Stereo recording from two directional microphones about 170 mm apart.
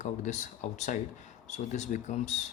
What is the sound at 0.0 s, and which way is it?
Speech, 45° left (ahead or behind).